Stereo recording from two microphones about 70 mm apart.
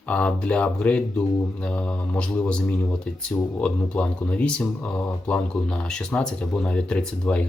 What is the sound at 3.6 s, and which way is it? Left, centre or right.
Speech, centre.